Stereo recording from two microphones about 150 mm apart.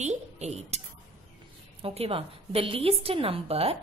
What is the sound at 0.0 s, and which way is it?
A woman's voice, 50° right (ahead or behind).